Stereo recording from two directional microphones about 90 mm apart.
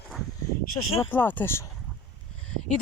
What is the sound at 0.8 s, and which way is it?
Speech, 55° left (ahead or behind).